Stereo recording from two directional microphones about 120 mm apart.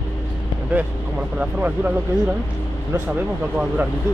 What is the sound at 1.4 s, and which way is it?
Speech, 10° right (ahead or behind).